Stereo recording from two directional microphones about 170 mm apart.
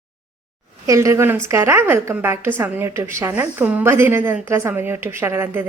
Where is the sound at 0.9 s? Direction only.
20° right (ahead or behind).